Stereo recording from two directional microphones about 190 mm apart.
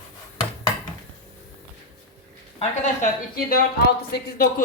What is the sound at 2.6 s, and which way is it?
Speech, 45° left (ahead or behind).